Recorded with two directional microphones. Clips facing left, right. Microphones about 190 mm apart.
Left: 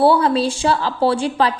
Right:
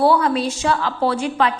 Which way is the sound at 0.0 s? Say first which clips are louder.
Left 2 dB; 30° left (ahead or behind).